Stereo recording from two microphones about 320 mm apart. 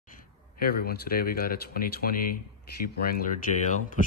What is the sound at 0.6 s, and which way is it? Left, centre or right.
Speech, left.